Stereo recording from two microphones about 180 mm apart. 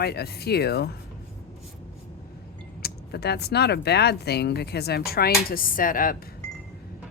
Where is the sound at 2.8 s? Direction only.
60° left (ahead or behind).